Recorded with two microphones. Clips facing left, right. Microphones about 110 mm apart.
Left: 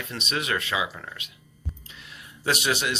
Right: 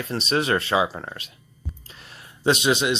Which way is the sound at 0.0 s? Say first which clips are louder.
Right 7 dB; 35° right (ahead or behind).